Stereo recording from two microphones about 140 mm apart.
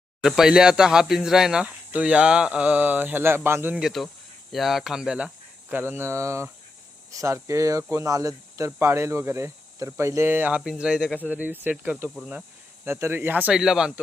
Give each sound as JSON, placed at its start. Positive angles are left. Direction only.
{"t": 0.2, "sound": "speech", "side_deg": -5}